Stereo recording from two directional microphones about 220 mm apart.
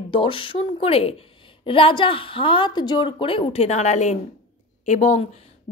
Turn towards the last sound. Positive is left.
turn(degrees=30)  # may be behind; listen again after turning